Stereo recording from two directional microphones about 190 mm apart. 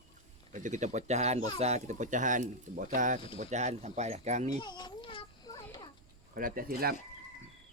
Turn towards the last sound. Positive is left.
turn(degrees=-50)  # may be behind; listen again after turning